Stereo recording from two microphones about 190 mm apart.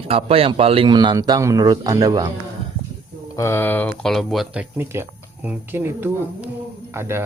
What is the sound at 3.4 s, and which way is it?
Speech, 15° left (ahead or behind).